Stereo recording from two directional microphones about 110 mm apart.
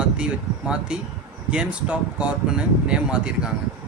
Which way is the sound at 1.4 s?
10° right (ahead or behind).